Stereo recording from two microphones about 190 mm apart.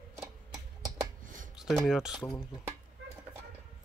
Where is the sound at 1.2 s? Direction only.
45° right (ahead or behind).